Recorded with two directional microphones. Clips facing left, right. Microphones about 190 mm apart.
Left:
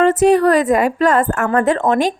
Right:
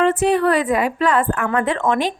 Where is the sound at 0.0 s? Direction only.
40° left (ahead or behind).